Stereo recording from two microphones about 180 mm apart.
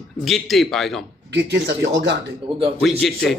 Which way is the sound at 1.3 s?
70° right (ahead or behind).